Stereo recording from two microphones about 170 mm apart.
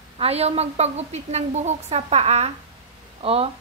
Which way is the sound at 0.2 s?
40° right (ahead or behind).